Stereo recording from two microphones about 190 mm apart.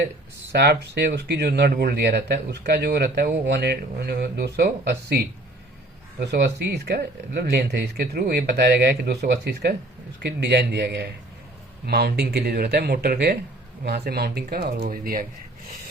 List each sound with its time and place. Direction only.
0.5 s speech: 60° right (ahead or behind)